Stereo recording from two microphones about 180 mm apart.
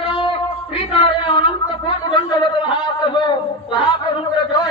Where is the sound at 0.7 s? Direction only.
30° left (ahead or behind).